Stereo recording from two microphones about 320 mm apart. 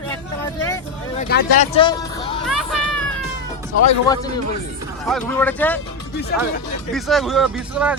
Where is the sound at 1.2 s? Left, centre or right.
Left.